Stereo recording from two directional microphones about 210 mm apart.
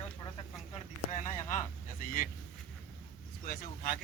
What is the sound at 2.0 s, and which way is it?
Speech, 40° left (ahead or behind).